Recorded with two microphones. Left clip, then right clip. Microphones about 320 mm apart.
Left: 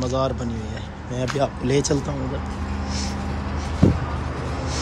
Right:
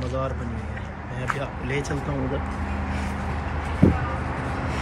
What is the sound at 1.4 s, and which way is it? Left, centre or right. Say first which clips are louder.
Speech: left 7 dB; centre.